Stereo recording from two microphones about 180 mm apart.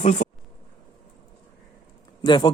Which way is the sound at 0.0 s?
40° left (ahead or behind).